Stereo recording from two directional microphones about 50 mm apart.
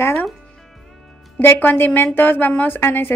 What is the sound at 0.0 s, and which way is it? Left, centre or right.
Speech, left.